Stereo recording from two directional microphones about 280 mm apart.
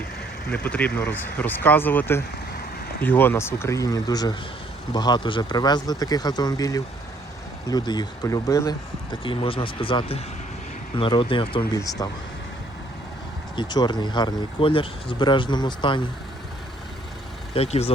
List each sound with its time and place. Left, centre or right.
0.5 s speech: centre
13.6 s speech: centre
17.5 s speech: left